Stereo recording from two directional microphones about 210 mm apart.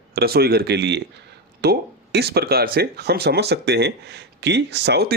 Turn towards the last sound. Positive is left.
turn(degrees=-50)  # may be behind; listen again after turning